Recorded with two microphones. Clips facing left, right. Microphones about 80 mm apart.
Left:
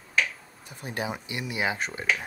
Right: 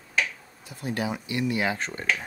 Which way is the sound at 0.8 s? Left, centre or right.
Left.